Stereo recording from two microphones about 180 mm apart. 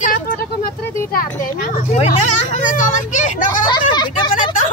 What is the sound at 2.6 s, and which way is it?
Speech, 45° left (ahead or behind).